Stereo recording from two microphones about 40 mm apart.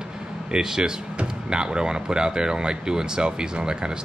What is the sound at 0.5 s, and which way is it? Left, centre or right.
Speech, centre.